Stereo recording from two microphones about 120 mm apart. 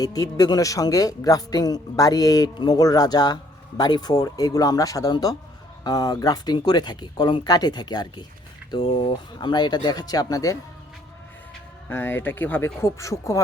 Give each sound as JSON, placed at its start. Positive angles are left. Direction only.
{"t": 0.0, "sound": "a man's voice", "side_deg": 30}
{"t": 11.9, "sound": "speech", "side_deg": 20}